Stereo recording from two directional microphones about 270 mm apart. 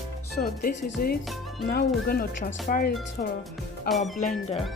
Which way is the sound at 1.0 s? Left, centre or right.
Left.